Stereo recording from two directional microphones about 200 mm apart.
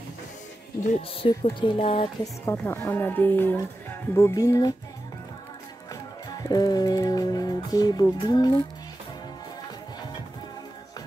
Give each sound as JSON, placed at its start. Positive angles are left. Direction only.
{"t": 0.8, "sound": "music", "side_deg": 30}
{"t": 2.4, "sound": "speech", "side_deg": 10}
{"t": 6.2, "sound": "music", "side_deg": 20}